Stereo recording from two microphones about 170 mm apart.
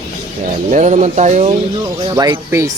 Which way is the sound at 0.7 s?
45° right (ahead or behind).